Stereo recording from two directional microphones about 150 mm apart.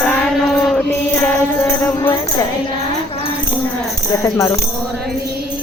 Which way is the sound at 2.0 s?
25° left (ahead or behind).